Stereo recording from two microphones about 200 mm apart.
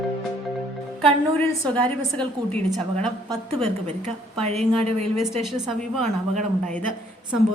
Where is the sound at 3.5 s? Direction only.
35° right (ahead or behind).